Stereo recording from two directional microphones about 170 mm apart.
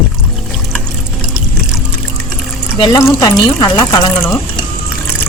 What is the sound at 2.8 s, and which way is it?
Speech, 25° left (ahead or behind).